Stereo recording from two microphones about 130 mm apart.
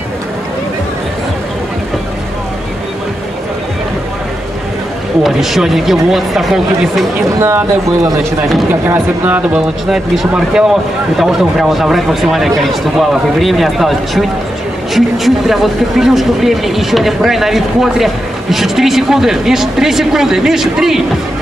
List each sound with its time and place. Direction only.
5.2 s speech: centre (ahead or behind)
7.3 s speech: 20° right (ahead or behind)
9.8 s speech: 5° right (ahead or behind)